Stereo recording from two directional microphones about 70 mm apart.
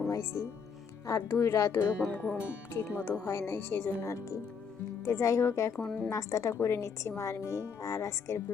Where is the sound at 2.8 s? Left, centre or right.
Left.